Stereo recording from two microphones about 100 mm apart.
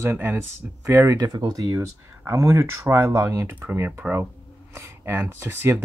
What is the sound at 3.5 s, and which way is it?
Speech, 20° right (ahead or behind).